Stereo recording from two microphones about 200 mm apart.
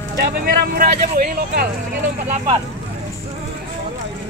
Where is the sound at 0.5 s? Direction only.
45° right (ahead or behind).